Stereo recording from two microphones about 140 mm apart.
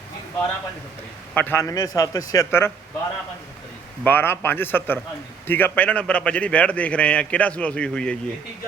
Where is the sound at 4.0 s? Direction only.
15° left (ahead or behind).